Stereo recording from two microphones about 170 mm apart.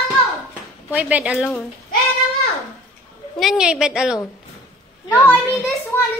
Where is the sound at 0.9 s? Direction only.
10° right (ahead or behind).